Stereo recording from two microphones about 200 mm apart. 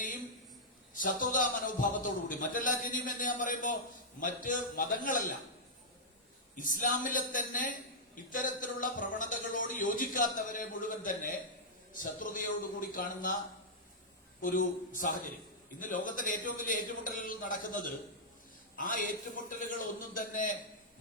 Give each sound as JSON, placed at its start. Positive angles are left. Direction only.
{"t": 0.9, "sound": "a man's voice", "side_deg": 40}
{"t": 6.6, "sound": "a man's voice", "side_deg": 40}
{"t": 14.4, "sound": "a man's voice", "side_deg": 40}